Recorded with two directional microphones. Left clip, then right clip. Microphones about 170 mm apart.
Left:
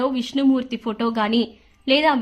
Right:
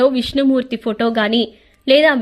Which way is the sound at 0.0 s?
20° right (ahead or behind).